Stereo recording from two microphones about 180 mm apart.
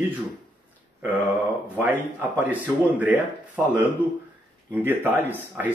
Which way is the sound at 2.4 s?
10° right (ahead or behind).